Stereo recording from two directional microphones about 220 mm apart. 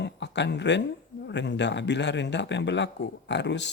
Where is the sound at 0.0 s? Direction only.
50° left (ahead or behind).